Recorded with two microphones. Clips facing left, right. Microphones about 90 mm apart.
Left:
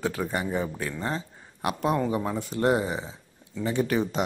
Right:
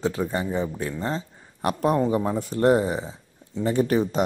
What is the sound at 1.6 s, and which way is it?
Speech, 40° right (ahead or behind).